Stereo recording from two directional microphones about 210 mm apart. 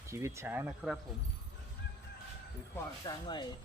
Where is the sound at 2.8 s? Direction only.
15° left (ahead or behind).